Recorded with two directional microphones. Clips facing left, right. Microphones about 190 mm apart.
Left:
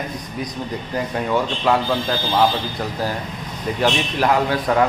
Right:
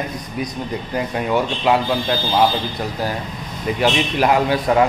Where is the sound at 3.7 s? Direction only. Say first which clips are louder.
Right 2 dB; 15° right (ahead or behind).